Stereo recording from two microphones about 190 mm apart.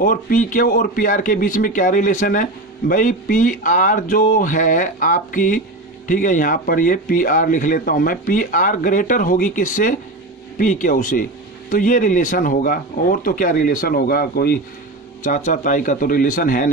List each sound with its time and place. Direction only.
0.0 s speech: 45° left (ahead or behind)
15.2 s speech: 40° left (ahead or behind)